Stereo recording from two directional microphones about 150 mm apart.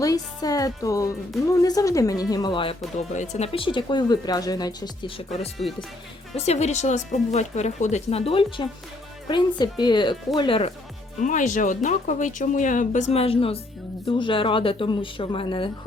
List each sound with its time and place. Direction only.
0.0 s speech: 25° left (ahead or behind)
3.1 s speech: 50° left (ahead or behind)
11.2 s speech: 55° left (ahead or behind); by 15.7 s 35° left (ahead or behind)